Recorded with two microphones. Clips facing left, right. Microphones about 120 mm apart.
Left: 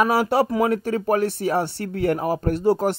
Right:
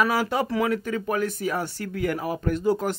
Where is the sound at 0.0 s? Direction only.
30° left (ahead or behind).